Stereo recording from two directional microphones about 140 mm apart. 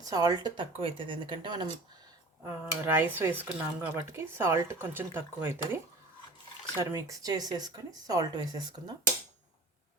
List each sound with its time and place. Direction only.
0.0 s a woman's voice: 25° right (ahead or behind)
2.8 s speech: 15° right (ahead or behind)